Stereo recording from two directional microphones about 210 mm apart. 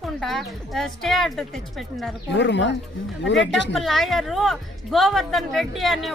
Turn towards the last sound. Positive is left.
turn(degrees=0)  # may be behind; listen again after turning